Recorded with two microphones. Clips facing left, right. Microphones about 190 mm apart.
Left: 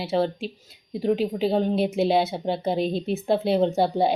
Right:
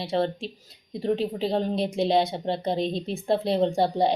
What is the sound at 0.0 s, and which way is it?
Speech, 5° left (ahead or behind).